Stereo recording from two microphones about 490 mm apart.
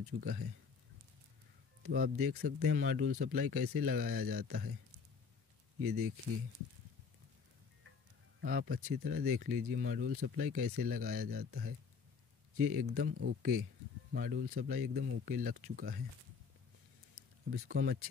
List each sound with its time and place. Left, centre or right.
0.0 s speech: centre
1.8 s speech: centre
5.8 s speech: right
8.4 s speech: centre
17.5 s speech: centre